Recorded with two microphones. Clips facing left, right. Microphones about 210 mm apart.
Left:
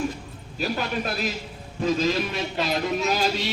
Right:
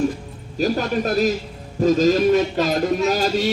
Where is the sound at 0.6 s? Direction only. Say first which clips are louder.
Right 7 dB; 40° right (ahead or behind).